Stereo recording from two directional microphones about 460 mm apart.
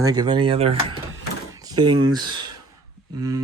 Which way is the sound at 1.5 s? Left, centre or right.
Centre.